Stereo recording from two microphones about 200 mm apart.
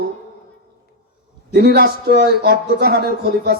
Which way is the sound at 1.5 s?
55° right (ahead or behind).